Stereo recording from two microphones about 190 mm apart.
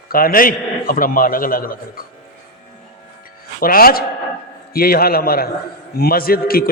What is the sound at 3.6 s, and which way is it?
A man's voice, 50° left (ahead or behind).